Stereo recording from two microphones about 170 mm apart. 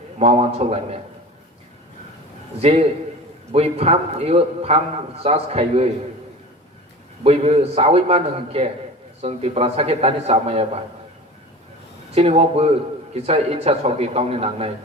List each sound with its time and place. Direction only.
0.2 s a man's voice: 40° right (ahead or behind)
2.6 s a man's voice: 40° right (ahead or behind)
7.3 s a man's voice: 35° right (ahead or behind)
12.1 s a man's voice: 35° right (ahead or behind)